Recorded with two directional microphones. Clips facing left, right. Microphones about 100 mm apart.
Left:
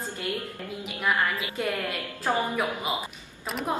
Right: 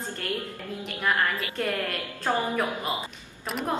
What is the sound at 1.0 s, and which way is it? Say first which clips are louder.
A woman's voice: even; 5° left (ahead or behind).